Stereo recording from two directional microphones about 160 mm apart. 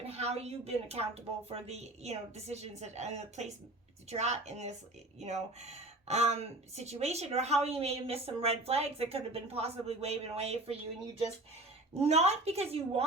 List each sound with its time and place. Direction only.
0.0 s a woman's voice: 40° right (ahead or behind)
11.9 s speech: 40° right (ahead or behind)